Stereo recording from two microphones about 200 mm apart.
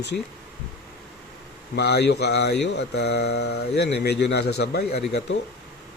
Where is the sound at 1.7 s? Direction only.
55° left (ahead or behind).